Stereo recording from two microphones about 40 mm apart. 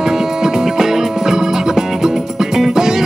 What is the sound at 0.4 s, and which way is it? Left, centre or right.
Music, centre.